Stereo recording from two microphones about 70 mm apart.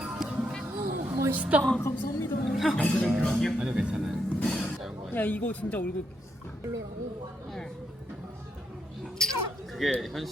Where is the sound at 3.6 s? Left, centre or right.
Centre.